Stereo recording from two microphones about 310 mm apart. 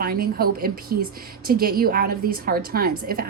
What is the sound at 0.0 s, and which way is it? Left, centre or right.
Speech, right.